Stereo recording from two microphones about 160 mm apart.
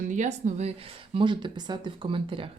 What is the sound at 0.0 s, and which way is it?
Speech, 50° right (ahead or behind).